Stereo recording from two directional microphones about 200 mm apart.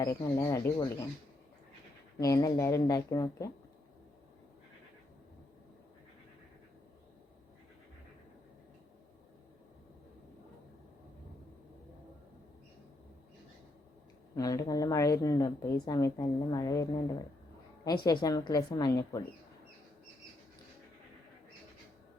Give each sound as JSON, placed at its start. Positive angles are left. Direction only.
{"t": 0.0, "sound": "a woman's voice", "side_deg": 15}
{"t": 2.1, "sound": "a woman's voice", "side_deg": 15}
{"t": 14.3, "sound": "a woman's voice", "side_deg": 15}
{"t": 18.0, "sound": "a woman's voice", "side_deg": 20}